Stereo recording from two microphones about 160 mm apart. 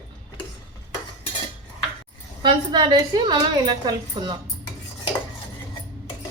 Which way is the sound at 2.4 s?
30° right (ahead or behind).